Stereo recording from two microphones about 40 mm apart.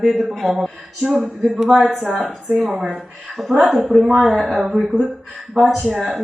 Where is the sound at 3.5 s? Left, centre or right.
Centre.